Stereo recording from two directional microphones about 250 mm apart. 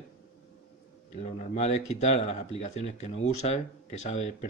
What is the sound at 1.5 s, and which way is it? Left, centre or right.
Speech, left.